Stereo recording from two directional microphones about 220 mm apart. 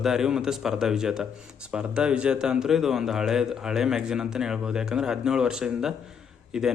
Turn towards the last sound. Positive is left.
turn(degrees=0)  # may be behind; listen again after turning